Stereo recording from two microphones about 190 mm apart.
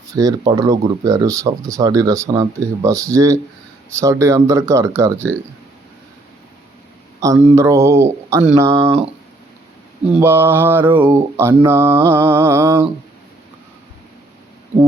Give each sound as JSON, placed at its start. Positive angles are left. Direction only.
{"t": 0.1, "sound": "speech", "side_deg": -20}
{"t": 1.0, "sound": "mantra", "side_deg": -20}
{"t": 7.2, "sound": "mantra", "side_deg": -15}
{"t": 8.8, "sound": "speech", "side_deg": -30}
{"t": 10.1, "sound": "mantra", "side_deg": -10}